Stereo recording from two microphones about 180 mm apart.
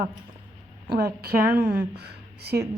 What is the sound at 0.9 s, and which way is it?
A woman's voice, 60° right (ahead or behind).